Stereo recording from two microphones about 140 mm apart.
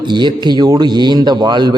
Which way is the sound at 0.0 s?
35° right (ahead or behind).